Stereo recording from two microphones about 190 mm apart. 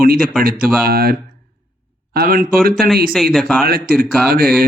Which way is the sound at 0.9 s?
50° right (ahead or behind).